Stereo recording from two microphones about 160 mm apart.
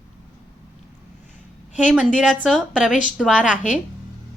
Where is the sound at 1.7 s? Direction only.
5° right (ahead or behind).